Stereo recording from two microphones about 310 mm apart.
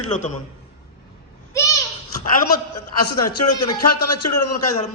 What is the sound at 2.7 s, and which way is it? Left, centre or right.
A man's voice, left.